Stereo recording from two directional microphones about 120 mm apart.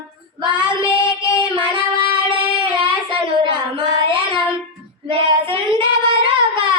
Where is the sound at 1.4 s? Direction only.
45° right (ahead or behind).